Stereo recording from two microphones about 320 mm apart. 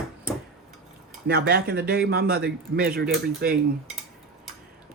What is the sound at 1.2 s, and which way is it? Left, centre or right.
Speech, right.